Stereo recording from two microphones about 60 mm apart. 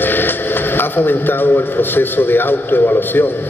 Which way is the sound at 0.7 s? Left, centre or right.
Left.